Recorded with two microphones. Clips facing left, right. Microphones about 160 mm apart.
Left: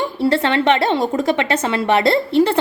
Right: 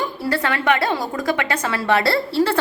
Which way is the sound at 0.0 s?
25° left (ahead or behind).